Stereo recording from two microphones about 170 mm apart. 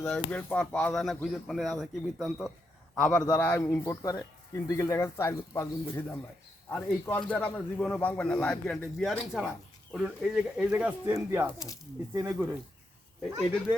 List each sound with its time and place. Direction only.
0.3 s a man's voice: 10° left (ahead or behind); by 12.5 s 10° right (ahead or behind)